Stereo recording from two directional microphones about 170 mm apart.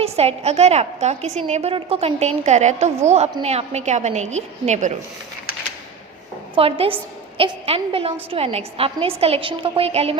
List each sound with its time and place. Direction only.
0.0 s a woman's voice: 35° right (ahead or behind)
6.6 s a woman's voice: 35° right (ahead or behind)